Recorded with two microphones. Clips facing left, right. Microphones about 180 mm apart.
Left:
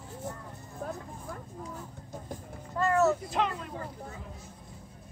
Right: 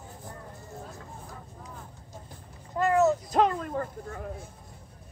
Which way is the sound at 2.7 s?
20° right (ahead or behind).